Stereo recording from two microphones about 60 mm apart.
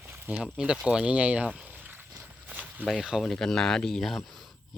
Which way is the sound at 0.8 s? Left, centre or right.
Centre.